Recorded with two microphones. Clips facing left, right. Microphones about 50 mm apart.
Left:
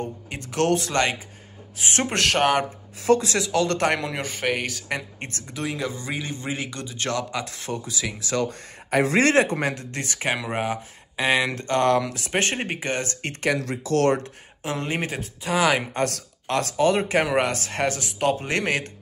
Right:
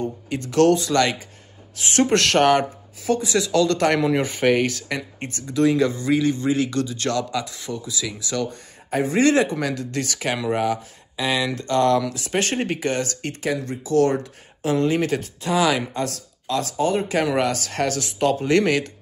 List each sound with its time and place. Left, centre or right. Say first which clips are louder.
0.3 s speech: right 6 dB; left
3.0 s speech: left 3 dB; left
3.3 s speech: right 3 dB; left
4.0 s speech: right 8 dB; centre
6.1 s speech: right 10 dB; left
7.4 s speech: even; left
12.5 s speech: right 4 dB; left
13.6 s speech: right 3 dB; left
14.6 s speech: right 7 dB; left
15.0 s speech: right 6 dB; centre
15.5 s speech: right 1 dB; left
15.9 s speech: left 1 dB; left
17.0 s speech: right 1 dB; left